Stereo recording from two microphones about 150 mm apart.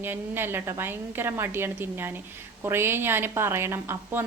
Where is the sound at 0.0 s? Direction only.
15° right (ahead or behind).